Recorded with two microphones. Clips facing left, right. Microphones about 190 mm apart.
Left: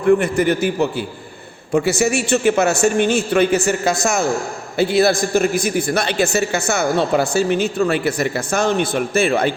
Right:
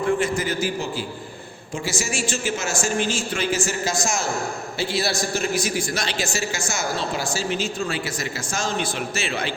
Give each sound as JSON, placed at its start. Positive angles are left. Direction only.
{"t": 0.2, "sound": "a man's voice", "side_deg": 60}